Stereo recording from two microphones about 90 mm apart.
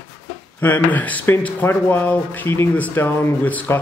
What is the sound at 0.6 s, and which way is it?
Speech, 20° left (ahead or behind).